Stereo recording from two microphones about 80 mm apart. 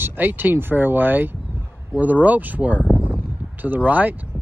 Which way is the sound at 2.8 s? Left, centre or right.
Centre.